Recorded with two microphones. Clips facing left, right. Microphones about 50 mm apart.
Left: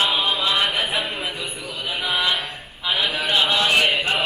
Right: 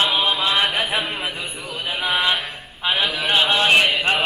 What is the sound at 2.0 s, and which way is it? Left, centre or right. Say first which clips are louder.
Music: right 2 dB; right.